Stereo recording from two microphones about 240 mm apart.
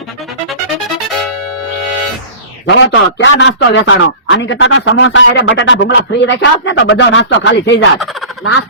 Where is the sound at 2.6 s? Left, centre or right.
Left.